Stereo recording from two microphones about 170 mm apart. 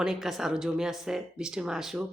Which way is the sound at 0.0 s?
Centre (ahead or behind).